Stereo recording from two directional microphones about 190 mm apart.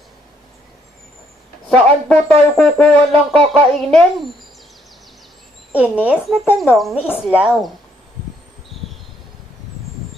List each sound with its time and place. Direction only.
1.7 s speech: 5° left (ahead or behind)
5.7 s a child's voice: 5° right (ahead or behind)